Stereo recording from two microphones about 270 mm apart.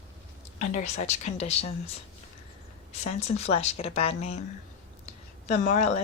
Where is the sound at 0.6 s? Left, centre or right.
Left.